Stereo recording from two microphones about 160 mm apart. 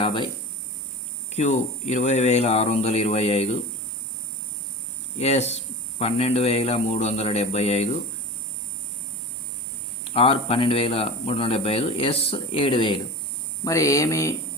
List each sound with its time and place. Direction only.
0.0 s speech: 30° left (ahead or behind)
1.3 s speech: 45° left (ahead or behind)
5.1 s speech: 45° left (ahead or behind)
10.0 s speech: 35° left (ahead or behind)
13.7 s speech: 20° left (ahead or behind)